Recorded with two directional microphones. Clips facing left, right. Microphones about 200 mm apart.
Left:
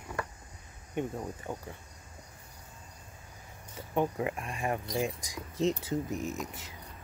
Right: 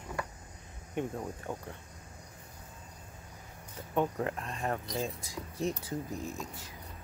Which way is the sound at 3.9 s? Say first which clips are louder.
Left 1 dB; 10° left (ahead or behind).